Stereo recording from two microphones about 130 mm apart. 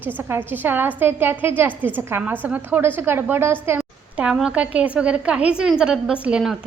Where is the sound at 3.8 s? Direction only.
5° right (ahead or behind).